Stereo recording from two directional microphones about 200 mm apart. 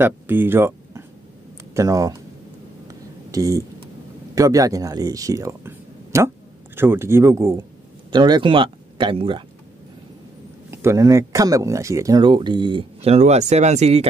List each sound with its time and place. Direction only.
0.0 s speech: 10° right (ahead or behind)
2.9 s a sound: 15° right (ahead or behind)
4.4 s speech: 15° right (ahead or behind)
10.7 s speech: 15° right (ahead or behind); by 14.0 s 35° right (ahead or behind)